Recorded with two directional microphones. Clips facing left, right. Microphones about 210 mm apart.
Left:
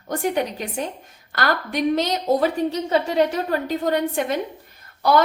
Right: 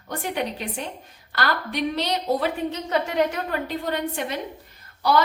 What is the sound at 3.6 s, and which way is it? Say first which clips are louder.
Speech: left 5 dB; 45° left (ahead or behind).